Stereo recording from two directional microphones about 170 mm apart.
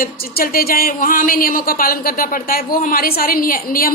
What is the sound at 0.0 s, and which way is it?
A woman's voice, 60° left (ahead or behind).